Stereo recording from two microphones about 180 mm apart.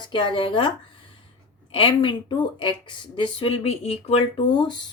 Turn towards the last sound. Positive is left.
turn(degrees=25)  # may be behind; listen again after turning